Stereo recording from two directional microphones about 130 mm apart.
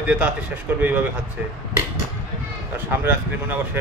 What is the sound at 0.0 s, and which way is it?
Speech, 10° right (ahead or behind).